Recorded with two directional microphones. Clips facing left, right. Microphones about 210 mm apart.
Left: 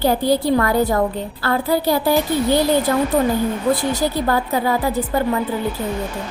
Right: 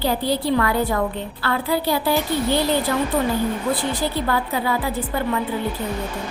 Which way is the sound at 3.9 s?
40° left (ahead or behind).